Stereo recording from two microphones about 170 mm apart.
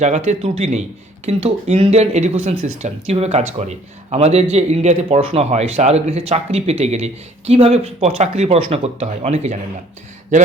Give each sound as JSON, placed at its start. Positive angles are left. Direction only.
{"t": 0.0, "sound": "speech", "side_deg": -40}